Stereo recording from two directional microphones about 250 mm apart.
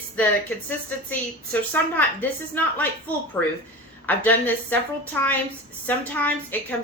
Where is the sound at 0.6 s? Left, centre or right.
Centre.